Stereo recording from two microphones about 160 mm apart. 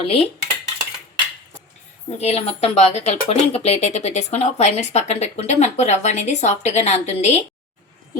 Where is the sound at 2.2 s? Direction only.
40° left (ahead or behind).